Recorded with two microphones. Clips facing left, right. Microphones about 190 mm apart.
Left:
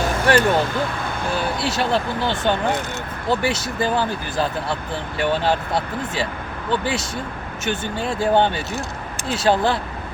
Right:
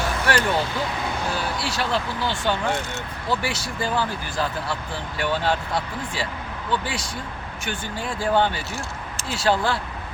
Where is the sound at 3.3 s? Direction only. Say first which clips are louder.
Left 5 dB; 20° left (ahead or behind).